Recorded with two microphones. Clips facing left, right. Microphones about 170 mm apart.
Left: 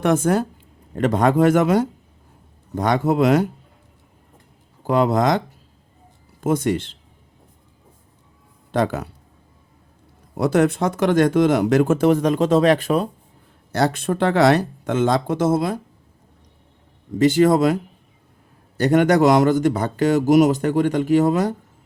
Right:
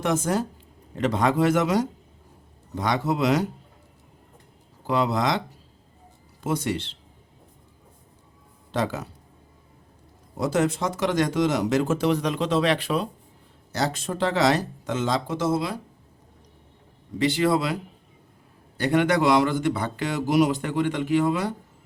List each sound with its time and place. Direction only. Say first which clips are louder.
0.0 s speech: left 6 dB; 55° left (ahead or behind)
4.9 s speech: left 6 dB; 50° left (ahead or behind)
6.4 s speech: left 6 dB; 50° left (ahead or behind)
8.7 s speech: left 6 dB; 55° left (ahead or behind)
10.3 s speech: left 6 dB; 60° left (ahead or behind)
13.7 s speech: left 6 dB; 60° left (ahead or behind)
17.2 s speech: left 7 dB; 45° left (ahead or behind)
18.8 s speech: left 6 dB; 45° left (ahead or behind)